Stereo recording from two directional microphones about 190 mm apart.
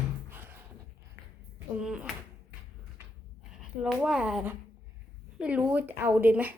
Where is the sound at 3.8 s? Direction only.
5° right (ahead or behind).